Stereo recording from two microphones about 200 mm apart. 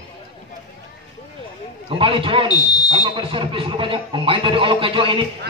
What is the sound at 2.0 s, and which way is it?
Speech, 25° right (ahead or behind).